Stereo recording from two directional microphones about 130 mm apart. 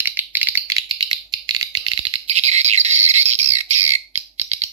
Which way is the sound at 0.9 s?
35° right (ahead or behind).